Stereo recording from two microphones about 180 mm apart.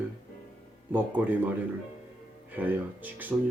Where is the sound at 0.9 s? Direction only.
10° right (ahead or behind).